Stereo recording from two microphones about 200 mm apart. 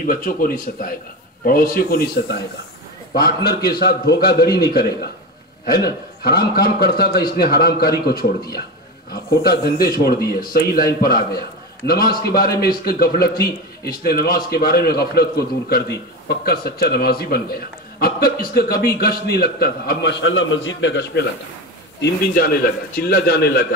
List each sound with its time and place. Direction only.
0.0 s a man's voice: 45° left (ahead or behind)
5.7 s a man's voice: 50° left (ahead or behind)
9.4 s a man's voice: 50° left (ahead or behind)
22.0 s a man's voice: 50° left (ahead or behind)